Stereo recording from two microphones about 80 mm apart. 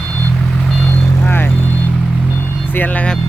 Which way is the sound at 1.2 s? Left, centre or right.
Left.